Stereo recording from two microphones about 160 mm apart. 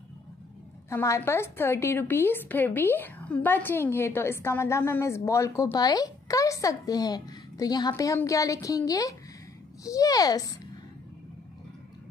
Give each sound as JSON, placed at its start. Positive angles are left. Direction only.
{"t": 0.8, "sound": "a woman's voice", "side_deg": 15}